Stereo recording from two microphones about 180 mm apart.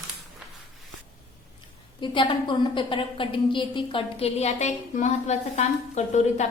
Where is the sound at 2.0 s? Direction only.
25° left (ahead or behind).